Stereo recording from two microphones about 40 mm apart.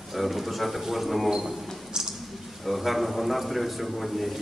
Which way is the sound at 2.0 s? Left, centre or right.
Centre.